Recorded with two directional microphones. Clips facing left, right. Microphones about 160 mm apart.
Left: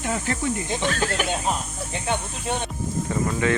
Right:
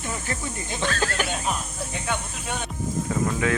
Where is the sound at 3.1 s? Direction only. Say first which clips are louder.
Left 2 dB; centre (ahead or behind).